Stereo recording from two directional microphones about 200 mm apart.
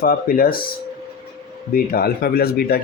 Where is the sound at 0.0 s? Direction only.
45° left (ahead or behind).